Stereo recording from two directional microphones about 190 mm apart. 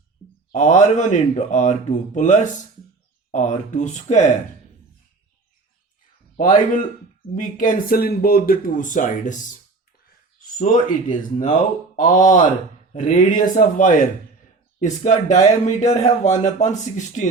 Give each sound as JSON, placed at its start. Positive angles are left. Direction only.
{"t": 0.5, "sound": "speech", "side_deg": 40}
{"t": 7.3, "sound": "speech", "side_deg": 45}